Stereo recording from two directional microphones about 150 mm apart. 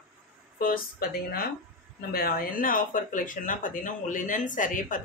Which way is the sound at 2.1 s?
80° left.